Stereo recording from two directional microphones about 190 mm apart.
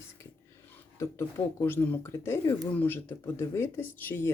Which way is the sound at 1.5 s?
10° left (ahead or behind).